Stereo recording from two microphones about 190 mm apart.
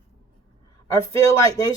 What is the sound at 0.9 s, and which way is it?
Speech, 15° left (ahead or behind).